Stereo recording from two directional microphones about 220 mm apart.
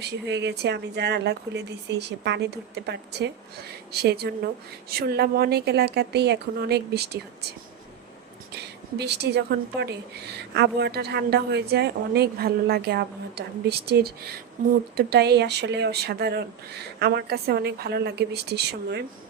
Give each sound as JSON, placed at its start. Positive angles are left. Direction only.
{"t": 0.0, "sound": "a woman's voice", "side_deg": -50}
{"t": 9.0, "sound": "a woman's voice", "side_deg": -50}